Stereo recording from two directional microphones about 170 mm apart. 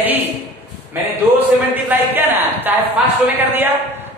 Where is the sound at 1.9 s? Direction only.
10° right (ahead or behind).